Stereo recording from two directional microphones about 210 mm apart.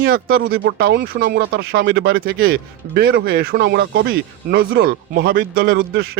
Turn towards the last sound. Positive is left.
turn(degrees=-45)  # may be behind; listen again after turning